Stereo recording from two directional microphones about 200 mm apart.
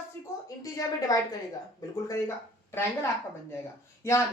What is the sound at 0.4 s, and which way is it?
Speech, 15° left (ahead or behind).